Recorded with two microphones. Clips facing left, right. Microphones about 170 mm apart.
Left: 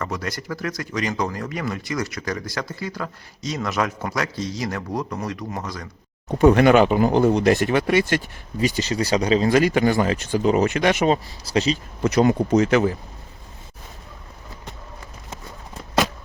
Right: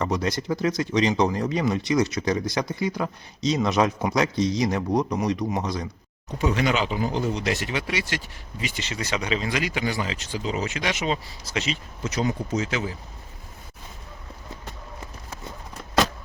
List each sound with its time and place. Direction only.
0.0 s speech: 20° right (ahead or behind)
6.2 s speech: 55° left (ahead or behind)
11.4 s speech: 35° left (ahead or behind)
12.0 s speech: 60° left (ahead or behind)